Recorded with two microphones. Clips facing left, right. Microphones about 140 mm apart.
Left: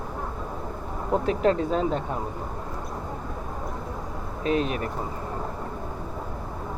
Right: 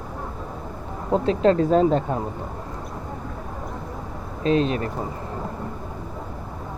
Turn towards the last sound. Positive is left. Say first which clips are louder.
# right 4 dB
turn(degrees=-30)  # may be behind; listen again after turning